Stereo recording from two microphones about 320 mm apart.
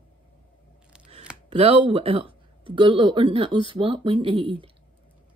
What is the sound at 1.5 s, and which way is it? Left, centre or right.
Speech, centre.